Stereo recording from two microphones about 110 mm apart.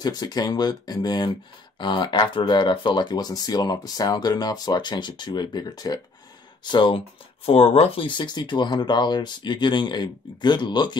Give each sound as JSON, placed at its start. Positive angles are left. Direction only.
{"t": 0.0, "sound": "speech", "side_deg": 40}
{"t": 7.4, "sound": "speech", "side_deg": 60}